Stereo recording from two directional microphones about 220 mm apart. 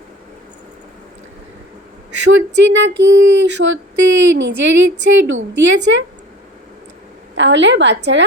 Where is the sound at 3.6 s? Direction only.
55° right (ahead or behind).